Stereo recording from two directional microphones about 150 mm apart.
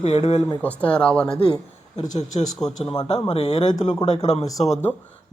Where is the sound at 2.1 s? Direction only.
55° left (ahead or behind).